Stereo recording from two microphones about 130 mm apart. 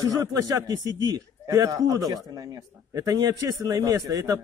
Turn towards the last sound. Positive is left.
turn(degrees=-25)  # may be behind; listen again after turning